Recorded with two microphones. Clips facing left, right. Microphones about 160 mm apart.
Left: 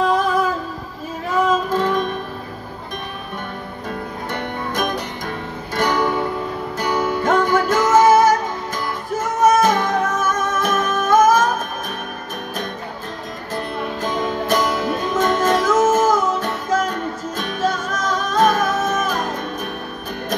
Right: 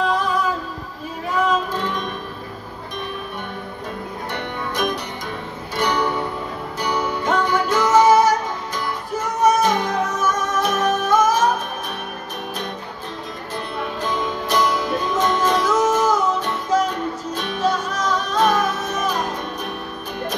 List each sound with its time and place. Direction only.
1.7 s music: 45° left (ahead or behind)
4.3 s music: 45° left (ahead or behind)
14.0 s music: 45° left (ahead or behind)